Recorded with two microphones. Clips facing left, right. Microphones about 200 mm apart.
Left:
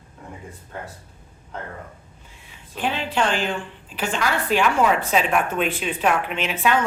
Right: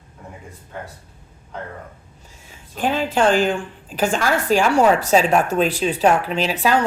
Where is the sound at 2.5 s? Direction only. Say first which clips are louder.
Right 4 dB; 45° right (ahead or behind).